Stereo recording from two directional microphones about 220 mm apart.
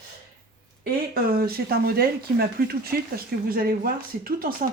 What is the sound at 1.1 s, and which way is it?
Speech, 45° right (ahead or behind).